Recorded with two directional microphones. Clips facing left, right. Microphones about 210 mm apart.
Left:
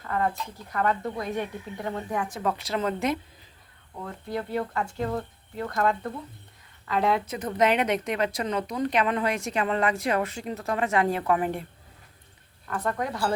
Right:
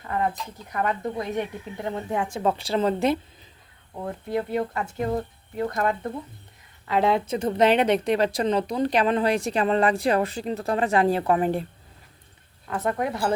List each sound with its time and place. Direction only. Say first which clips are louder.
0.0 s a woman's voice: right 1 dB; 20° right (ahead or behind)
12.6 s speech: right 3 dB; 20° right (ahead or behind)